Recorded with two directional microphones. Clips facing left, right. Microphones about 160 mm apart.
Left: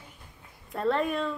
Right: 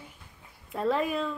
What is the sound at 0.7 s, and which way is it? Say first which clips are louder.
Speech: even; centre (ahead or behind).